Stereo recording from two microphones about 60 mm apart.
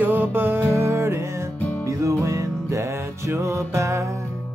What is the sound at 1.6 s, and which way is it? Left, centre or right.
Music, left.